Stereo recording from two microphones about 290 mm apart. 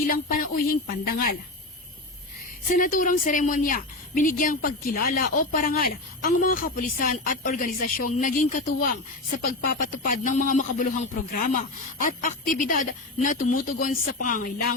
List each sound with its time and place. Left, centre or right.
0.1 s a woman's voice: left
2.7 s a woman's voice: left